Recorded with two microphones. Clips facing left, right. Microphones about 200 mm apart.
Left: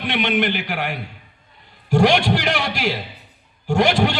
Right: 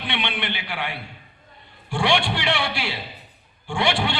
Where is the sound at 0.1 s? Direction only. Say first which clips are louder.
Left 9 dB; 45° left (ahead or behind).